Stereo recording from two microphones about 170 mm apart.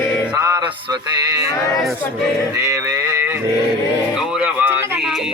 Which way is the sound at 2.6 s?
20° right (ahead or behind).